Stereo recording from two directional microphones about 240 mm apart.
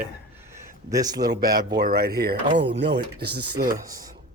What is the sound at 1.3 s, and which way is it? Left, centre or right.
Speech, right.